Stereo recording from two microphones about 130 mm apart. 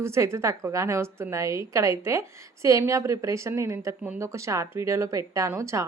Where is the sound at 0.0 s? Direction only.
20° right (ahead or behind).